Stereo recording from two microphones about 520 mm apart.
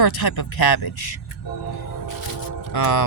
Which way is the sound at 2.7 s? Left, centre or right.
Left.